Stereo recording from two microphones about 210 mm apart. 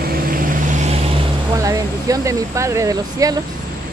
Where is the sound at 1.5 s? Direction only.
15° right (ahead or behind).